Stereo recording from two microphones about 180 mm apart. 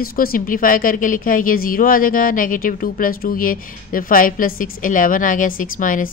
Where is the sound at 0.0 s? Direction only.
55° left (ahead or behind).